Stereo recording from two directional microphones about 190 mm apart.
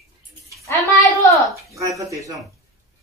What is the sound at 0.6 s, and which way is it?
Speech, 15° left (ahead or behind).